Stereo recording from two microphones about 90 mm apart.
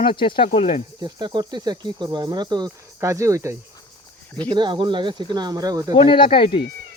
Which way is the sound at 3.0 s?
35° right (ahead or behind).